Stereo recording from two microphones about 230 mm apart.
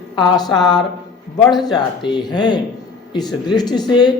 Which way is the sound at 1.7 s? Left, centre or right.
Centre.